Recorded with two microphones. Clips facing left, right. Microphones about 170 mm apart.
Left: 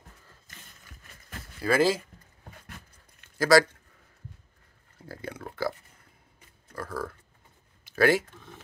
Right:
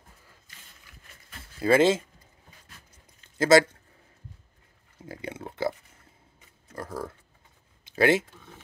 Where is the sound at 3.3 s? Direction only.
20° right (ahead or behind).